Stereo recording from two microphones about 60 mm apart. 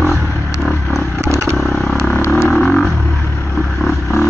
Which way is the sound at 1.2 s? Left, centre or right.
Right.